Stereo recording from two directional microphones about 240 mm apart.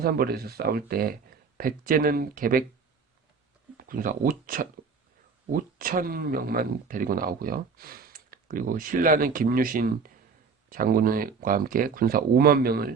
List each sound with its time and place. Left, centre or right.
0.0 s speech: right
3.8 s speech: right